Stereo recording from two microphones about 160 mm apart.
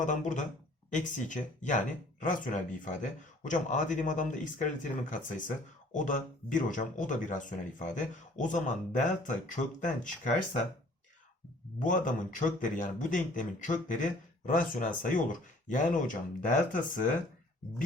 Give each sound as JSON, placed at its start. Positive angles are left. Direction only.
{"t": 0.0, "sound": "speech", "side_deg": 50}
{"t": 11.8, "sound": "speech", "side_deg": 55}